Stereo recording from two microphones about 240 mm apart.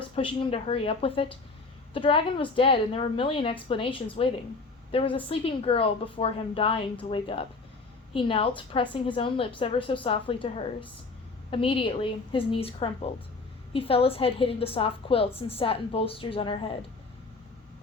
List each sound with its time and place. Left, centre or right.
0.2 s a woman's voice: left